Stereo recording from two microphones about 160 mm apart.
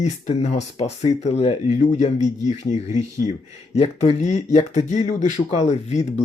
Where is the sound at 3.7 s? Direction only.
40° left (ahead or behind).